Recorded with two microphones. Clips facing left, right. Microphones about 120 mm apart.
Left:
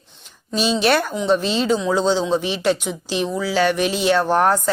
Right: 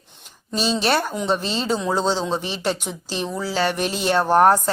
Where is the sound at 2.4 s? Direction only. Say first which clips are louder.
Left 5 dB; 35° right (ahead or behind).